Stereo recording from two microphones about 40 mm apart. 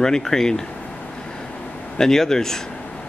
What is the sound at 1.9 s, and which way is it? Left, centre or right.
Speech, centre.